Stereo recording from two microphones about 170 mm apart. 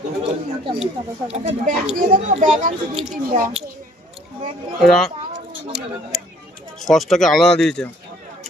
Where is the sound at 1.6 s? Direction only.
50° right (ahead or behind).